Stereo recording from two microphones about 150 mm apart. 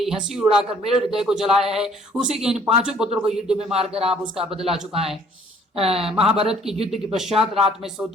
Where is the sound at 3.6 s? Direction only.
45° right (ahead or behind).